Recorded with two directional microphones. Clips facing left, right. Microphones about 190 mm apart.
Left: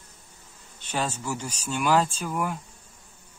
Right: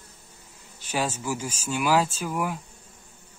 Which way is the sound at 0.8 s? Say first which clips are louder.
Right 1 dB; 10° right (ahead or behind).